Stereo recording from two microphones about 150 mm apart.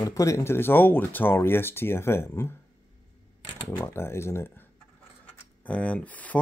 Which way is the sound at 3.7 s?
15° left (ahead or behind).